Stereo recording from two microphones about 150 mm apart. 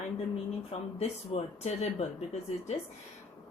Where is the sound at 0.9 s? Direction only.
45° left (ahead or behind).